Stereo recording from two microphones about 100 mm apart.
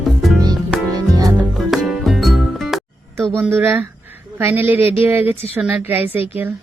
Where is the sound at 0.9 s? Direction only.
40° right (ahead or behind).